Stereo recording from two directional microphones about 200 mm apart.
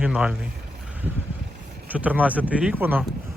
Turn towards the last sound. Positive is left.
turn(degrees=-10)  # may be behind; listen again after turning